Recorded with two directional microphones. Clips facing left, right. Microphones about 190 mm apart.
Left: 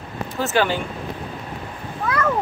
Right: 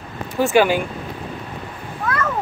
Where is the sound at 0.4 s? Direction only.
15° right (ahead or behind).